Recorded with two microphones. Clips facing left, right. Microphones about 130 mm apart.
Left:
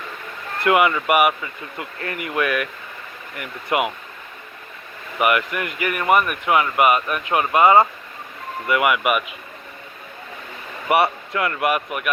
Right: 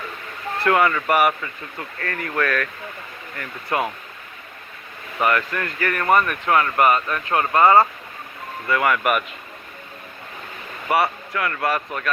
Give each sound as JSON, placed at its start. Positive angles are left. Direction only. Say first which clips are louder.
{"t": 0.6, "sound": "speech", "louder": "left 1 dB", "side_deg": 15}
{"t": 5.2, "sound": "speech", "louder": "left 1 dB", "side_deg": 15}
{"t": 10.8, "sound": "speech", "louder": "left 2 dB", "side_deg": 25}